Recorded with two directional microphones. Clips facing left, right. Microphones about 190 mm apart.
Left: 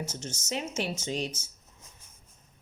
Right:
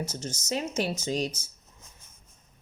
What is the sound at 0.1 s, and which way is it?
A woman's voice, 35° right (ahead or behind).